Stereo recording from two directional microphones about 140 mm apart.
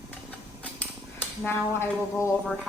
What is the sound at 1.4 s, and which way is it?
Speech, 15° left (ahead or behind).